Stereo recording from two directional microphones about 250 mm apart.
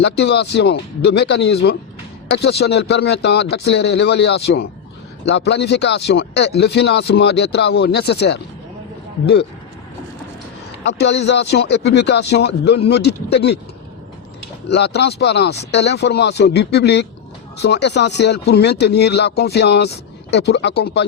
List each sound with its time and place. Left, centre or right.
0.0 s speech: left
10.8 s speech: left
14.7 s speech: left